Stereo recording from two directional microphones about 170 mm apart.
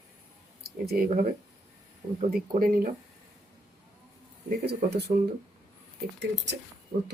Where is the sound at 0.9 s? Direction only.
55° right (ahead or behind).